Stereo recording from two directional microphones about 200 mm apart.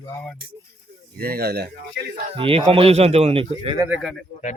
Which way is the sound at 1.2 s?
50° right (ahead or behind).